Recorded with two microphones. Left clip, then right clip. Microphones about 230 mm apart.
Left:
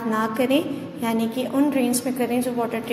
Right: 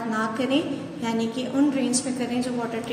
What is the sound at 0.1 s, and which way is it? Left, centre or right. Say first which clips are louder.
A woman's voice: left 4 dB; left.